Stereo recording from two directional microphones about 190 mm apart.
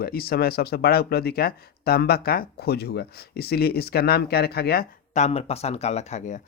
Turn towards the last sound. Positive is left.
turn(degrees=35)  # may be behind; listen again after turning